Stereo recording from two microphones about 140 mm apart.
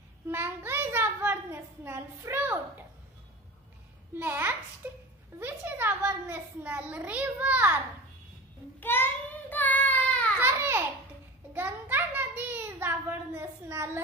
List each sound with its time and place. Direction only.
0.3 s a child's voice: 15° right (ahead or behind)
4.1 s a child's voice: 15° right (ahead or behind)
8.7 s child singing: 15° left (ahead or behind)
10.4 s a sound: 15° right (ahead or behind)